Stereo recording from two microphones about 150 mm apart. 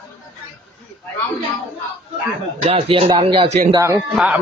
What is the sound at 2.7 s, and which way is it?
Speech, 40° right (ahead or behind).